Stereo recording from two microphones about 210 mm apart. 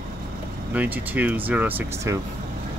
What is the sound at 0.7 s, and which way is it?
Speech, 10° right (ahead or behind).